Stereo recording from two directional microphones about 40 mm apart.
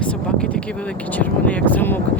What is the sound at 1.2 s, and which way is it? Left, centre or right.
Speech, left.